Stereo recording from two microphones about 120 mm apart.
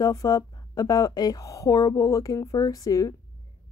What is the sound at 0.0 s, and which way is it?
Speech, 30° left (ahead or behind).